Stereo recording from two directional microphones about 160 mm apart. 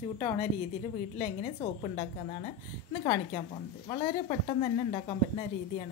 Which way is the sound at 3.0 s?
30° left (ahead or behind).